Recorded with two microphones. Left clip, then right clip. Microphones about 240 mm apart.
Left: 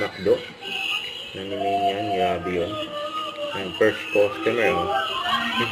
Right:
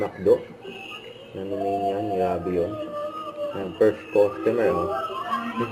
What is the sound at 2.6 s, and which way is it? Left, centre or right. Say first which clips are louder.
Speech: left 1 dB; centre.